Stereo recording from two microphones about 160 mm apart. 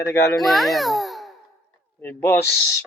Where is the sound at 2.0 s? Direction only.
15° left (ahead or behind).